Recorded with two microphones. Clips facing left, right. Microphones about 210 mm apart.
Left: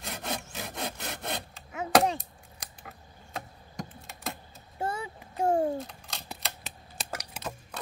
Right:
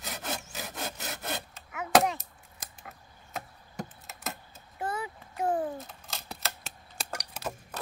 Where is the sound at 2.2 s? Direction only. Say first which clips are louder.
Left 4 dB; centre (ahead or behind).